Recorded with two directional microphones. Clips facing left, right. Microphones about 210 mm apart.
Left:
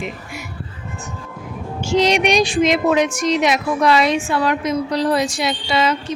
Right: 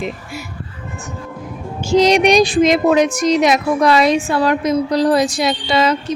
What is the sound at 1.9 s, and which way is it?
Speech, 40° right (ahead or behind).